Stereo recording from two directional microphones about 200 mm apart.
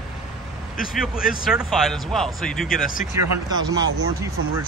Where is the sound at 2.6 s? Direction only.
45° left (ahead or behind).